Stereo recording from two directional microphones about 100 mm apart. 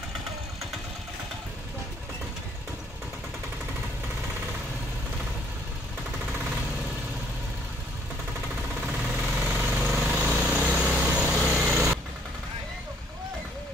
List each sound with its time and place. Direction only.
8.8 s jackhammer: 10° right (ahead or behind)
9.8 s vehicle: 15° right (ahead or behind)
10.1 s vehicle: 5° right (ahead or behind)
11.6 s sewing machine: 10° right (ahead or behind)